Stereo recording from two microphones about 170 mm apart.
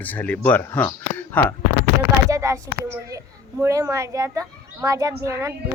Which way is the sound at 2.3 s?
20° right (ahead or behind).